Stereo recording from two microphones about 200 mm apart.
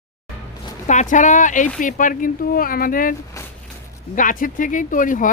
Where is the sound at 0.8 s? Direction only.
40° left (ahead or behind).